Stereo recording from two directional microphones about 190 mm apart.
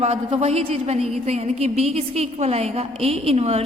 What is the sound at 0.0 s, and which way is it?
A woman's voice, 35° right (ahead or behind).